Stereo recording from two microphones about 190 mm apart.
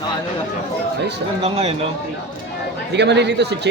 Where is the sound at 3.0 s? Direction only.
65° right (ahead or behind).